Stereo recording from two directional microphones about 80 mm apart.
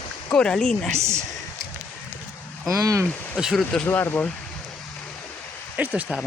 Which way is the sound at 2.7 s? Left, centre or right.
Right.